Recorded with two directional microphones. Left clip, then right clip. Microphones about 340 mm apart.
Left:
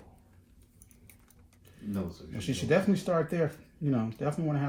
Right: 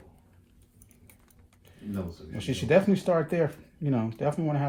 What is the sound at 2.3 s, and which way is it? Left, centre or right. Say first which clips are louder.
Speech: right 4 dB; right.